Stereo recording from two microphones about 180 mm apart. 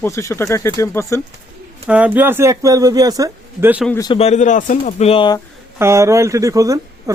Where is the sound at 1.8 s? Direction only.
10° right (ahead or behind).